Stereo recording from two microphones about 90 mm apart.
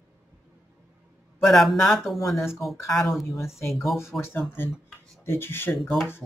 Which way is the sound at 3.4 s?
30° left (ahead or behind).